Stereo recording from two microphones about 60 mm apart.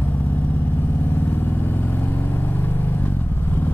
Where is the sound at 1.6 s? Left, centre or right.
Left.